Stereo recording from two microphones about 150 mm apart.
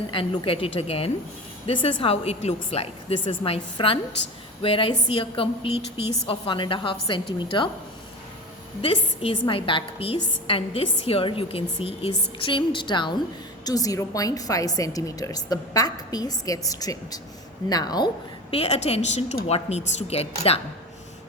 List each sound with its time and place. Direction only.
0.1 s a woman's voice: 35° left (ahead or behind)
8.8 s a woman's voice: 35° left (ahead or behind)
18.5 s a woman's voice: 45° left (ahead or behind)